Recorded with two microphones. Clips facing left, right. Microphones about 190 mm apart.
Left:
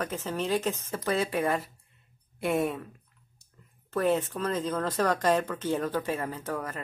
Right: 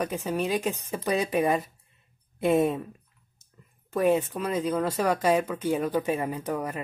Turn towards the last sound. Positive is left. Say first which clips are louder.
# right 4 dB
turn(degrees=-15)  # may be behind; listen again after turning